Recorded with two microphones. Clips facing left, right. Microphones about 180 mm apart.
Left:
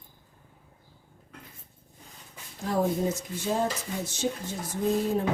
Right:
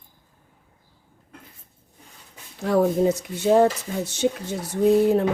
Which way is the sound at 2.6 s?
70° right (ahead or behind).